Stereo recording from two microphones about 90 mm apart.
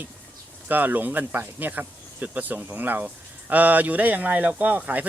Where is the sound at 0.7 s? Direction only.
20° right (ahead or behind).